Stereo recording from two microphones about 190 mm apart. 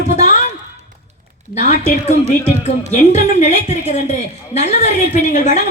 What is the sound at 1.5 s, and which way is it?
A man's voice, 40° left (ahead or behind).